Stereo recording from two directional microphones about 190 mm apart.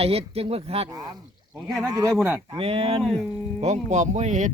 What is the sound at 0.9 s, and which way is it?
Speech, 20° right (ahead or behind).